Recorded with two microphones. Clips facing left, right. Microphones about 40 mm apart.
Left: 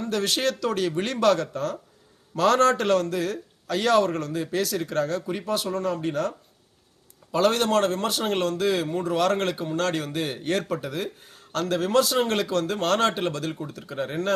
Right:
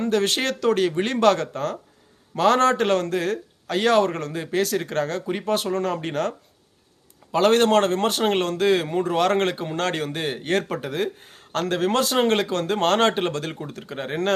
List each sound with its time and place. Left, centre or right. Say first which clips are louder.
0.1 s a man's voice: even; right
1.3 s speech: right 2 dB; right
2.3 s a man's voice: right 1 dB; right
7.3 s a man's voice: right 4 dB; right